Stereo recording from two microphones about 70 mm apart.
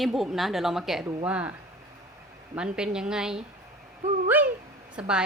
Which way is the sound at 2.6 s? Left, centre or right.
Centre.